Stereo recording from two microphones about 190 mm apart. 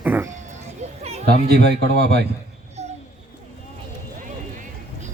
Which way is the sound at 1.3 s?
60° right (ahead or behind).